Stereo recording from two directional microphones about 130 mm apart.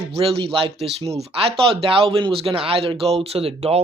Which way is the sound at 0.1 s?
45° right (ahead or behind).